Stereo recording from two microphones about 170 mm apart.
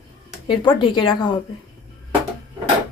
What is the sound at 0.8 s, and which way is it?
Speech, 30° left (ahead or behind).